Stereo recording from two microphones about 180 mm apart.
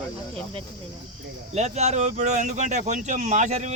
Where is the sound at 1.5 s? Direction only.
40° right (ahead or behind).